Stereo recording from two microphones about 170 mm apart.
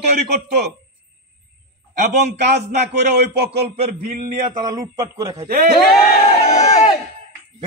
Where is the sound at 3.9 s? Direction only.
55° right (ahead or behind).